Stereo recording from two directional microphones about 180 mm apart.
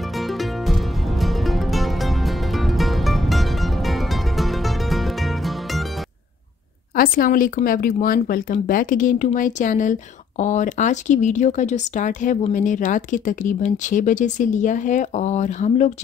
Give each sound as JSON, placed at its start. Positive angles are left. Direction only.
{"t": 0.2, "sound": "music", "side_deg": 0}
{"t": 7.0, "sound": "speech", "side_deg": 50}